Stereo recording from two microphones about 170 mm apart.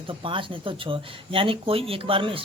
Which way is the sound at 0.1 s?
30° right (ahead or behind).